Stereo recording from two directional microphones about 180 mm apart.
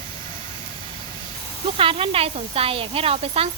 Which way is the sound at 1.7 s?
30° right (ahead or behind).